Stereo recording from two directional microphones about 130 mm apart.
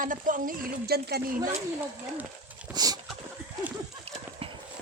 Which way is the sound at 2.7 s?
30° right (ahead or behind).